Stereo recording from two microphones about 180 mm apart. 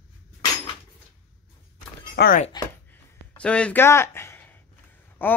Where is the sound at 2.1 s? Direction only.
60° left (ahead or behind).